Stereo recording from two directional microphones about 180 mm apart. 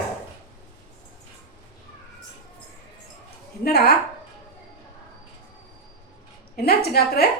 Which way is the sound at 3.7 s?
60° left (ahead or behind).